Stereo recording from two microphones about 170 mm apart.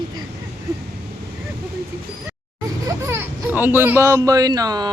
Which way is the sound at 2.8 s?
15° right (ahead or behind).